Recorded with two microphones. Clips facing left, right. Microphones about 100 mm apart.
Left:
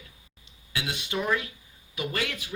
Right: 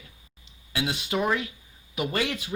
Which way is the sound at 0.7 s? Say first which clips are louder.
Right 4 dB; 30° right (ahead or behind).